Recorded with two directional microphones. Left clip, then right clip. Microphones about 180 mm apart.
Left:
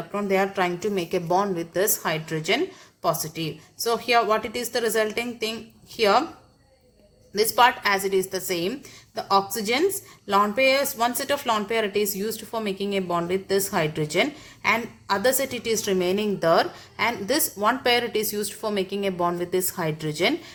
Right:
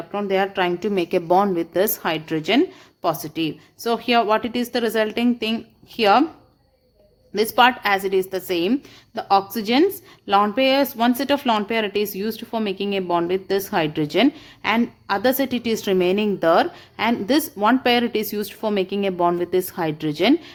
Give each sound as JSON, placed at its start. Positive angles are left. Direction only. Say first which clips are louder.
{"t": 0.1, "sound": "a woman's voice", "louder": "right 2 dB", "side_deg": -40}
{"t": 7.3, "sound": "a woman's voice", "louder": "right 2 dB", "side_deg": -40}